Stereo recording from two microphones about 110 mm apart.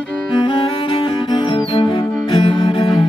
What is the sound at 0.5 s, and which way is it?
Music, 50° left (ahead or behind).